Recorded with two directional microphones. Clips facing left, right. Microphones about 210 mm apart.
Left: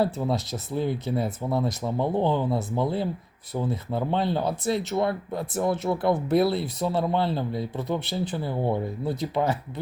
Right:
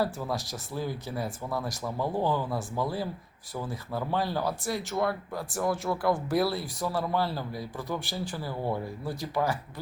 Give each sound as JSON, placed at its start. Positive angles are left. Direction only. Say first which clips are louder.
{"t": 0.0, "sound": "speech", "louder": "left 5 dB", "side_deg": 25}